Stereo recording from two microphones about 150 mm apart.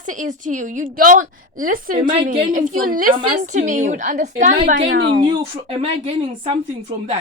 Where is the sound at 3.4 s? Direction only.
55° right (ahead or behind).